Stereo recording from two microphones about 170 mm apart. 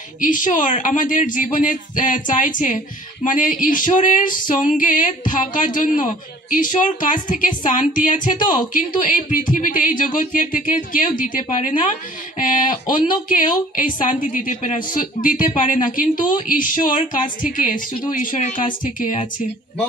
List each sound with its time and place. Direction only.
0.2 s a woman's voice: 50° left (ahead or behind)
12.9 s a woman's voice: 55° left (ahead or behind)